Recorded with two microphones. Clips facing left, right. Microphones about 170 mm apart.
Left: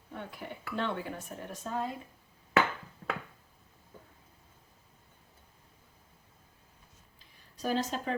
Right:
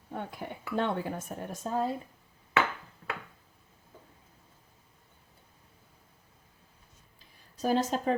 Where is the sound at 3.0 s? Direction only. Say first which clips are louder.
Left 2 dB; 40° left (ahead or behind).